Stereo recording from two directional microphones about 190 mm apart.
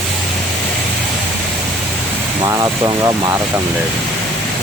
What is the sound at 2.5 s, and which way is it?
Speech, 15° right (ahead or behind).